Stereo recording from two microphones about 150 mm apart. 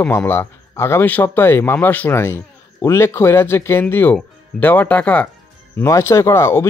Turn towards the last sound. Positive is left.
turn(degrees=20)  # may be behind; listen again after turning